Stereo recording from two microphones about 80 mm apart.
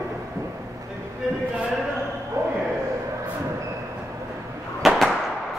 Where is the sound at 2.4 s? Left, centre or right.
Right.